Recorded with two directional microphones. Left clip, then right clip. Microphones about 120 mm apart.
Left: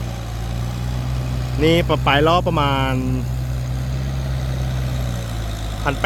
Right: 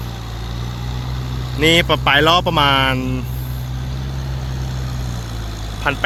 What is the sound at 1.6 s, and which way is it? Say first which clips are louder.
Speech: right 3 dB; 5° right (ahead or behind).